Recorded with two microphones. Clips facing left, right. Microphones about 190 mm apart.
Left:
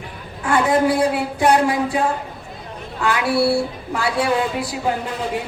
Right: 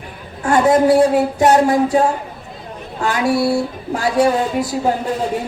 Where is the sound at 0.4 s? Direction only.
45° right (ahead or behind).